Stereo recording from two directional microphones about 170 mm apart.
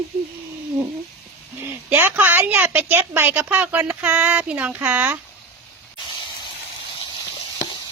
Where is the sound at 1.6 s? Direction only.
10° right (ahead or behind).